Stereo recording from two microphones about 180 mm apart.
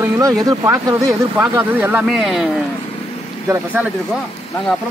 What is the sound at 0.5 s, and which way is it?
Speech, 20° right (ahead or behind).